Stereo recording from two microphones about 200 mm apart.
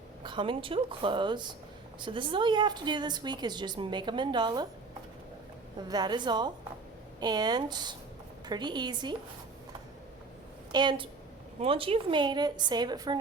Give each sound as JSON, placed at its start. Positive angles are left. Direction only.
{"t": 0.2, "sound": "a woman's voice", "side_deg": -25}
{"t": 5.9, "sound": "a woman's voice", "side_deg": -20}
{"t": 10.7, "sound": "a woman's voice", "side_deg": -20}